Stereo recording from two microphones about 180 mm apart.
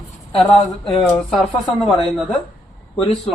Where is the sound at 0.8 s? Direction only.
Centre (ahead or behind).